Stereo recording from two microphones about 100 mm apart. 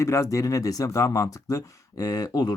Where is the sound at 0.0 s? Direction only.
30° left (ahead or behind).